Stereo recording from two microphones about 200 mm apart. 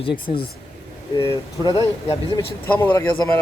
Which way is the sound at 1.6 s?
20° left (ahead or behind).